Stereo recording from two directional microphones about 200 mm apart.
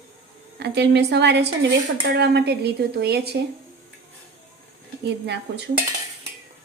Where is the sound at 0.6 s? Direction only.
55° right (ahead or behind).